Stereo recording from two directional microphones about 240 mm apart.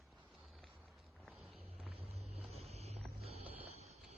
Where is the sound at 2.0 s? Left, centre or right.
Right.